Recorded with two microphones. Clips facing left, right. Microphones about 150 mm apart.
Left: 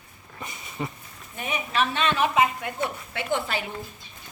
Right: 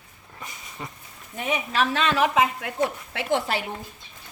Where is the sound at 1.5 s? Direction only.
90° right.